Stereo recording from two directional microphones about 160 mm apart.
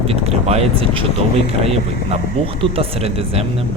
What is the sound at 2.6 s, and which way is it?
Speech, 35° right (ahead or behind).